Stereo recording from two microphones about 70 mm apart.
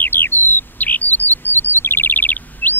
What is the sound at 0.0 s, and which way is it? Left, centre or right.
Bird, left.